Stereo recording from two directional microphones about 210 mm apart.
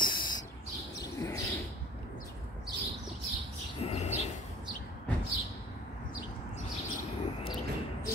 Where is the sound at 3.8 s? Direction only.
30° left (ahead or behind).